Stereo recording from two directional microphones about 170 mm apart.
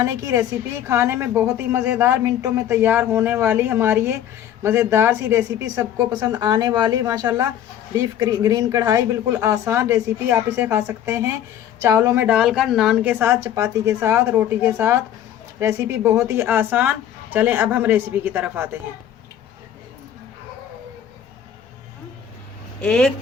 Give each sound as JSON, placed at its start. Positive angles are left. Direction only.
{"t": 0.0, "sound": "a woman's voice", "side_deg": -20}
{"t": 22.8, "sound": "speech", "side_deg": 5}